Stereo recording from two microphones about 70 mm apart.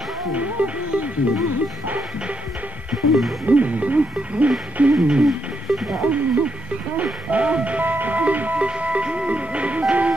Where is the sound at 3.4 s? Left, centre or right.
Right.